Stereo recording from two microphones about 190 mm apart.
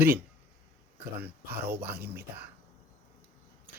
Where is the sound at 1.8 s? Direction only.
55° right (ahead or behind).